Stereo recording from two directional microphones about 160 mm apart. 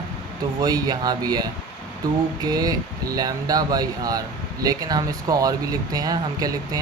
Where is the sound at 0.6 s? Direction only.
25° right (ahead or behind).